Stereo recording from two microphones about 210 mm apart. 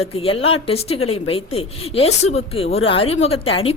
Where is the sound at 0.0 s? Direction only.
25° left (ahead or behind).